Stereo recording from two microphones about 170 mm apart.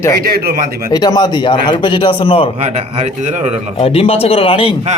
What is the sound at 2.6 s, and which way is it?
Speech, 40° right (ahead or behind).